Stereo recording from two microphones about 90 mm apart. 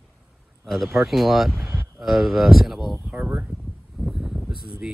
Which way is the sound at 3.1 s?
20° right (ahead or behind).